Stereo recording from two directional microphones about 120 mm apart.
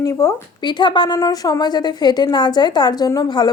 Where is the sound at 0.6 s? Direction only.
40° left (ahead or behind).